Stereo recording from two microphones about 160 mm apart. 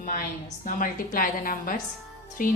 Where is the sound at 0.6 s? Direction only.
60° left (ahead or behind).